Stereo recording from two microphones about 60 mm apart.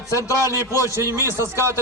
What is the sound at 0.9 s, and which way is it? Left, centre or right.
Speech, right.